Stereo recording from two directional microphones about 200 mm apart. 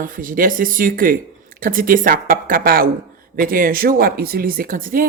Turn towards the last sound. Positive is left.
turn(degrees=-45)  # may be behind; listen again after turning